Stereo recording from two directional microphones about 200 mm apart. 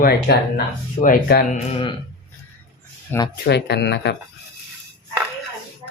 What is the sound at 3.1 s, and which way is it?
Speech, 10° left (ahead or behind).